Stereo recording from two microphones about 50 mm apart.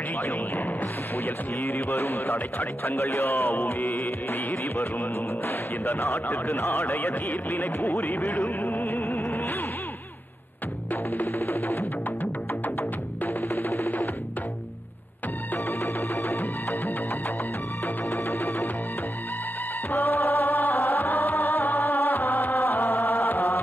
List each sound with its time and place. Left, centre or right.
1.6 s music: left
3.0 s music: left
6.5 s speech: left
8.7 s music: left
11.1 s music: left
13.2 s music: left
15.8 s music: left
18.1 s music: left
19.9 s music: left